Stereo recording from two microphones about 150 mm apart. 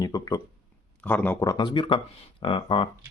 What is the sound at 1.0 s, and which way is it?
Speech, 10° left (ahead or behind).